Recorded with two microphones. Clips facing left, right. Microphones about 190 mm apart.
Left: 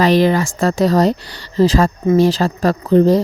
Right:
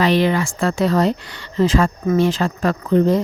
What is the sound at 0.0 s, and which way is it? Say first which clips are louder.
Speech: left 3 dB; 40° left (ahead or behind).